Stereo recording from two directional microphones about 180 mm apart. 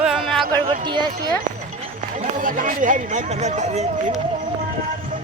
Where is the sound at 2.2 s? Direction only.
45° right (ahead or behind).